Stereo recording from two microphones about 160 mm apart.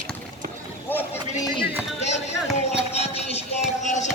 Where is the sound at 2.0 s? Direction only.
45° left (ahead or behind).